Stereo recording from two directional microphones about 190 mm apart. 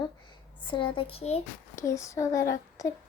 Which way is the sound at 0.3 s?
25° left (ahead or behind).